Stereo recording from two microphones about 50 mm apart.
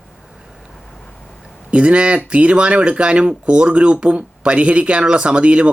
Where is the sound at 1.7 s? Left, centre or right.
Right.